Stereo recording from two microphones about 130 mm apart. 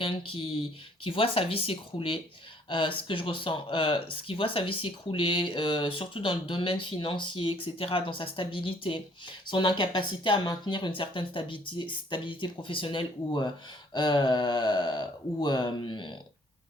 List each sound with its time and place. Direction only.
0.0 s speech: 45° left (ahead or behind)